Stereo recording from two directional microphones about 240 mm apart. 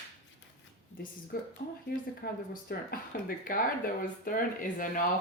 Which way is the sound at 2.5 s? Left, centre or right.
Left.